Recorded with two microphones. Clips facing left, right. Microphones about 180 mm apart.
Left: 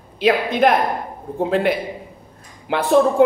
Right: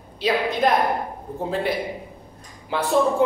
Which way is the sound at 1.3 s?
70° left (ahead or behind).